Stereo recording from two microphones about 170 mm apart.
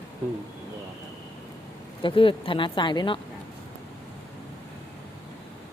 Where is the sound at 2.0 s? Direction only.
30° left (ahead or behind).